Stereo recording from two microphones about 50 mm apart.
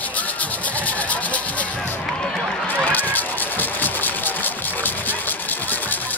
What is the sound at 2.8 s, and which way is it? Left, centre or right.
Fowl, left.